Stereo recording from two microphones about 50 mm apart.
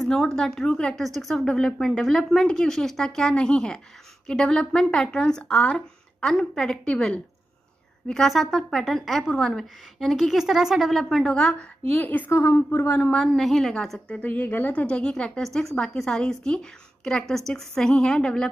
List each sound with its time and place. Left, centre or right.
0.0 s a woman's voice: centre
1.0 s a woman's voice: centre; by 5.8 s left
6.2 s a woman's voice: centre
8.1 s a woman's voice: centre
11.3 s a woman's voice: centre
12.0 s speech: left
12.3 s a woman's voice: left
13.1 s a woman's voice: centre
13.9 s speech: left
14.9 s a woman's voice: centre